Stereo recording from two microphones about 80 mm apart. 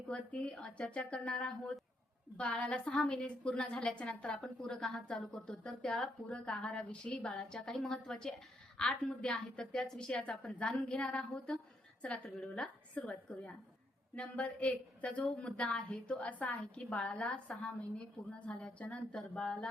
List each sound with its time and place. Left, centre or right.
0.1 s a woman's voice: centre